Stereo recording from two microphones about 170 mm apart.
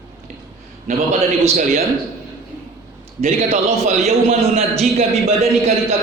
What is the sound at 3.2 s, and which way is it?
A man's voice, 40° right (ahead or behind).